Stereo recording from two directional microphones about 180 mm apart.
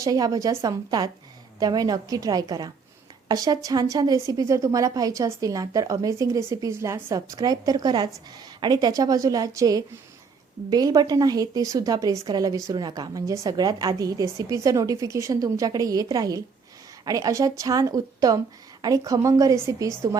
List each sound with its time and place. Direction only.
0.0 s a woman's voice: 20° right (ahead or behind)